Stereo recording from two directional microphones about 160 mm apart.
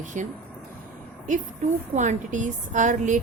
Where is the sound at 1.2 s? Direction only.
50° right (ahead or behind).